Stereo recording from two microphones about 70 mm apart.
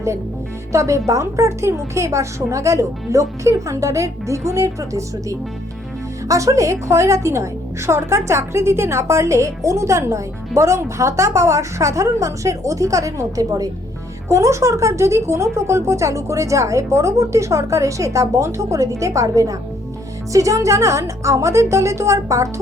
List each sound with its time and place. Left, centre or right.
0.7 s speech: right
14.3 s speech: right